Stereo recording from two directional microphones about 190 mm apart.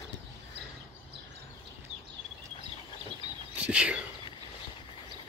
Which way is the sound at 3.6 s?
5° right (ahead or behind).